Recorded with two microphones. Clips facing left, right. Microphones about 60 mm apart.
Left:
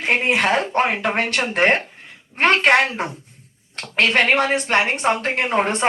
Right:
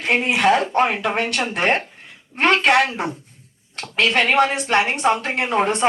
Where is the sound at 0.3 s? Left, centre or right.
Left.